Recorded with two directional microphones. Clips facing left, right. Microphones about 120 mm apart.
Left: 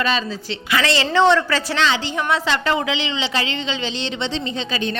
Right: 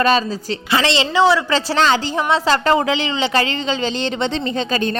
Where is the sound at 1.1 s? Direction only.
10° right (ahead or behind).